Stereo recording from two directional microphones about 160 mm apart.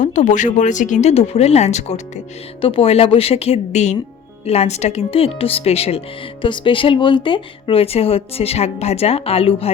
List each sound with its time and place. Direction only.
0.0 s speech: 50° left (ahead or behind)